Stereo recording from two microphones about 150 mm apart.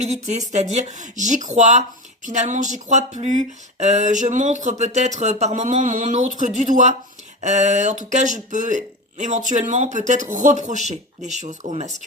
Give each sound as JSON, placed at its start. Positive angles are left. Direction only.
{"t": 0.0, "sound": "speech", "side_deg": -50}